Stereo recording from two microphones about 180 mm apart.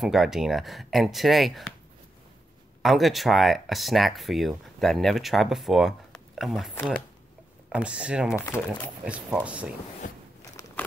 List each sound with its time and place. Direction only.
0.0 s speech: centre (ahead or behind)
2.8 s speech: centre (ahead or behind)
6.7 s speech: 10° left (ahead or behind)
7.7 s speech: 5° right (ahead or behind)
10.0 s a sound: 45° left (ahead or behind)
10.4 s a sound: 15° left (ahead or behind)